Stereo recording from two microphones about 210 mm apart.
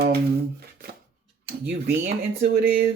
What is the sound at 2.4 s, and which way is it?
Speech, 50° right (ahead or behind).